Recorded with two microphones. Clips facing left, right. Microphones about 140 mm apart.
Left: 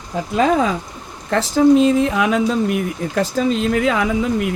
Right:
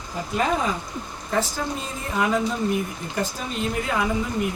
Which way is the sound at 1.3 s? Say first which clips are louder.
Left 13 dB; 85° left.